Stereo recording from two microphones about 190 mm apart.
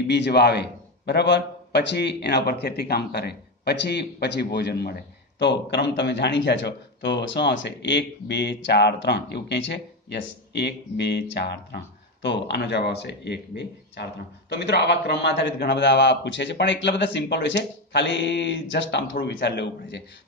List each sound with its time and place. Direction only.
0.1 s a man's voice: 60° left (ahead or behind)